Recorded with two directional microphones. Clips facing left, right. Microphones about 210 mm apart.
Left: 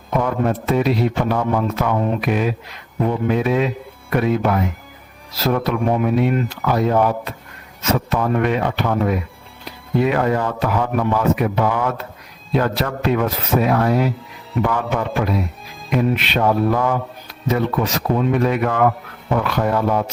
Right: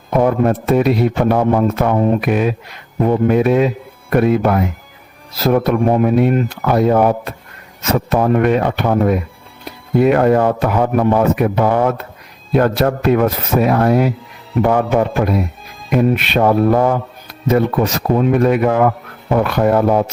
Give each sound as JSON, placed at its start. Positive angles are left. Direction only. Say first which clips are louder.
{"t": 0.2, "sound": "speech", "louder": "right 6 dB", "side_deg": -50}
{"t": 5.6, "sound": "speech", "louder": "right 5 dB", "side_deg": -50}
{"t": 7.9, "sound": "speech", "louder": "right 7 dB", "side_deg": -45}
{"t": 16.7, "sound": "speech", "louder": "right 5 dB", "side_deg": -40}